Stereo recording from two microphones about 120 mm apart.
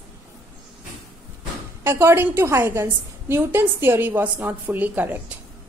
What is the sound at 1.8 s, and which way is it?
A woman's voice, 20° right (ahead or behind).